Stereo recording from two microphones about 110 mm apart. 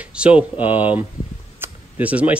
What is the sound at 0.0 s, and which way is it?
Speech, 10° right (ahead or behind).